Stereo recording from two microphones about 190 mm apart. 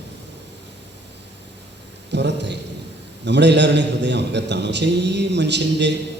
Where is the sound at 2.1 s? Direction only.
65° right (ahead or behind).